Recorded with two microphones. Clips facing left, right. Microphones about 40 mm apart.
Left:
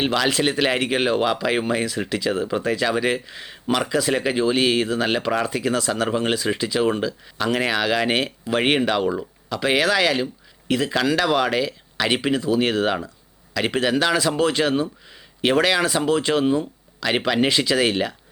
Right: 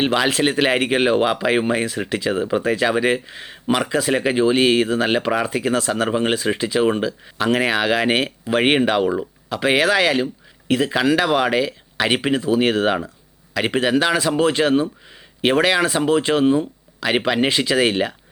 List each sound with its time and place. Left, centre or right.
0.0 s speech: centre
5.5 s speech: right